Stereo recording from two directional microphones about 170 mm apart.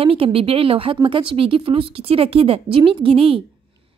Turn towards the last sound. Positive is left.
turn(degrees=-35)  # may be behind; listen again after turning